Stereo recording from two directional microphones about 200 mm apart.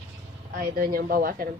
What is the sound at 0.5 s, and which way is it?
Speech, 45° right (ahead or behind).